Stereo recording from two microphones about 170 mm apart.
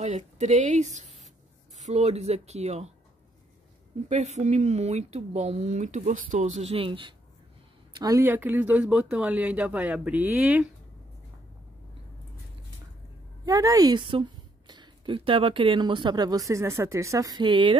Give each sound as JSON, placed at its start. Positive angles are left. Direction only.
{"t": 0.0, "sound": "speech", "side_deg": -45}
{"t": 4.1, "sound": "speech", "side_deg": -40}
{"t": 13.5, "sound": "speech", "side_deg": -20}